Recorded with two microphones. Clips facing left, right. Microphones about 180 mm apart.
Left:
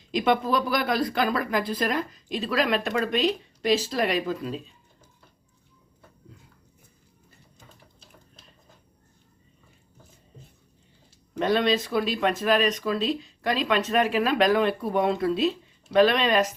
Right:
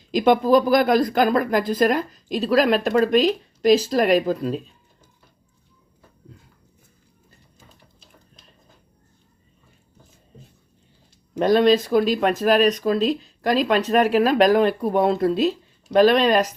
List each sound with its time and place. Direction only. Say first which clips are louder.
0.1 s speech: right 7 dB; 45° right (ahead or behind)
11.3 s speech: right 7 dB; 40° right (ahead or behind)